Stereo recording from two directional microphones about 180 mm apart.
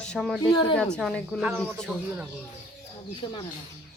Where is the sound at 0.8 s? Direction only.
5° left (ahead or behind).